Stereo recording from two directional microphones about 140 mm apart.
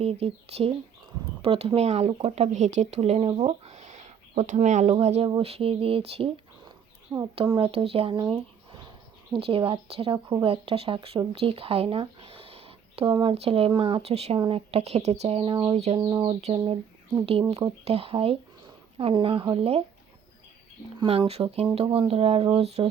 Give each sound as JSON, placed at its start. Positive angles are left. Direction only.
{"t": 0.0, "sound": "speech", "side_deg": -50}
{"t": 7.1, "sound": "speech", "side_deg": -15}
{"t": 7.5, "sound": "speech", "side_deg": -40}
{"t": 9.3, "sound": "speech", "side_deg": -40}
{"t": 14.3, "sound": "speech", "side_deg": -35}
{"t": 14.7, "sound": "speech", "side_deg": -50}
{"t": 17.8, "sound": "speech", "side_deg": -45}
{"t": 21.0, "sound": "speech", "side_deg": -45}